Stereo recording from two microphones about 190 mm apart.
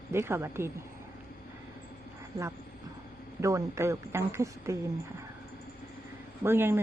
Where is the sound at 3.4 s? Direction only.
15° right (ahead or behind).